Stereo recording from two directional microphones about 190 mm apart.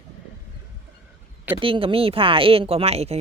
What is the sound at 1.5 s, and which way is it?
Speech, 30° right (ahead or behind).